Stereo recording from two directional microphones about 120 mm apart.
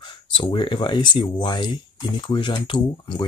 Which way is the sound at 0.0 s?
45° left (ahead or behind).